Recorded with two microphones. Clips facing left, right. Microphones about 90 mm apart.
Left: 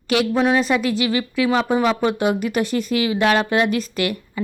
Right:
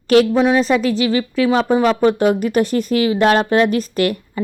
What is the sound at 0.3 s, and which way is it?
Speech, 20° right (ahead or behind).